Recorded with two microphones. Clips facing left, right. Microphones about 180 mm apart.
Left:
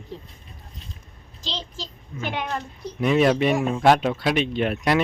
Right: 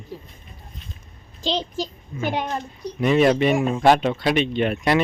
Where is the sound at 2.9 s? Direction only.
Centre (ahead or behind).